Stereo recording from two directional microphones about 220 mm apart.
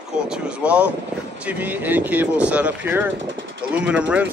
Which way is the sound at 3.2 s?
55° right (ahead or behind).